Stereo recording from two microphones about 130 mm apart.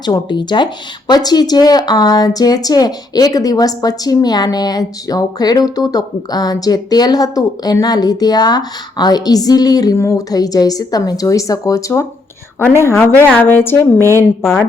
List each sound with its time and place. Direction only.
0.0 s a woman's voice: 35° left (ahead or behind); by 14.6 s 20° left (ahead or behind)